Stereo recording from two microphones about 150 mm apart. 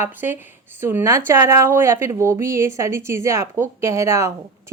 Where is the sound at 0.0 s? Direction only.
15° right (ahead or behind).